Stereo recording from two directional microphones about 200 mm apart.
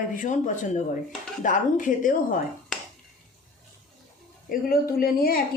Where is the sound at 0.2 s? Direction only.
40° left (ahead or behind).